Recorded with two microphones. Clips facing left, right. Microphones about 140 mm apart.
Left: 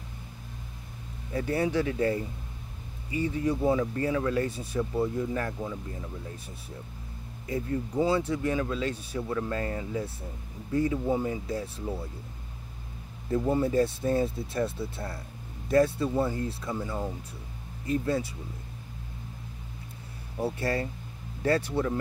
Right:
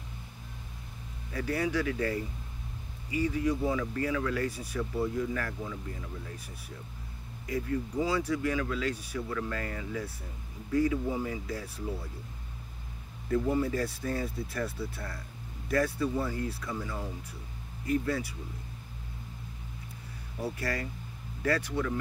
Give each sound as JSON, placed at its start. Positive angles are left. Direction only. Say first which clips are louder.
{"t": 1.3, "sound": "speech", "louder": "left 3 dB", "side_deg": 25}
{"t": 7.4, "sound": "speech", "louder": "left 1 dB", "side_deg": 30}
{"t": 13.3, "sound": "speech", "louder": "left 2 dB", "side_deg": 25}
{"t": 20.3, "sound": "speech", "louder": "left 5 dB", "side_deg": 25}